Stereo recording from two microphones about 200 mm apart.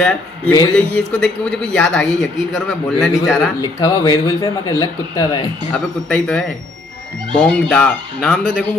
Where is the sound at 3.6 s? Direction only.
20° left (ahead or behind).